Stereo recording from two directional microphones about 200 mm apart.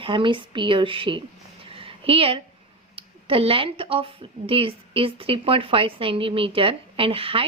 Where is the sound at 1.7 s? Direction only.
25° right (ahead or behind).